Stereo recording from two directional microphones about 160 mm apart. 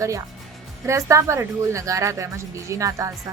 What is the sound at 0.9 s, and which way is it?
A woman's voice, 20° right (ahead or behind).